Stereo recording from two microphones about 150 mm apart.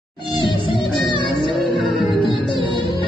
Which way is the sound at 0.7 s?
35° left (ahead or behind).